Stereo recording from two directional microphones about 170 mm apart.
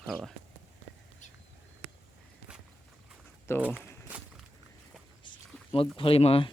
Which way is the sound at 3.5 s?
15° left (ahead or behind).